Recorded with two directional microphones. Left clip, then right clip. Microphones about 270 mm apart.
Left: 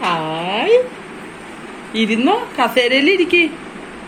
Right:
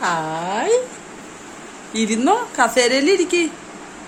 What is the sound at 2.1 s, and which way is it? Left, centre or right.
A woman's voice, right.